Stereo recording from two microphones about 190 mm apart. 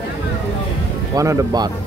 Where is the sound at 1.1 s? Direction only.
15° right (ahead or behind).